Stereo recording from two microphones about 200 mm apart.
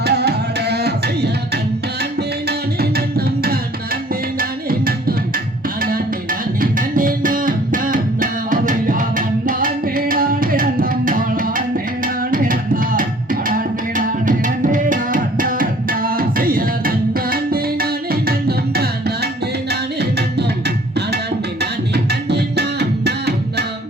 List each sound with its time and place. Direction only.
0.0 s tabla: 55° right (ahead or behind)
2.5 s music: 50° right (ahead or behind)
6.6 s music: 45° right (ahead or behind)
21.6 s music: 55° right (ahead or behind)